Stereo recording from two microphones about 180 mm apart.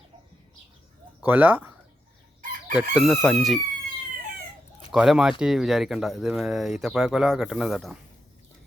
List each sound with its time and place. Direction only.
1.2 s speech: 10° right (ahead or behind)
2.4 s chicken: 45° right (ahead or behind)
2.9 s speech: centre (ahead or behind)
4.9 s speech: 5° right (ahead or behind)